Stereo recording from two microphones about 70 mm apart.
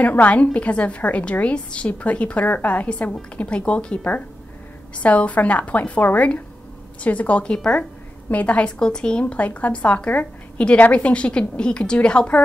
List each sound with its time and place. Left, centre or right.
0.0 s a woman's voice: left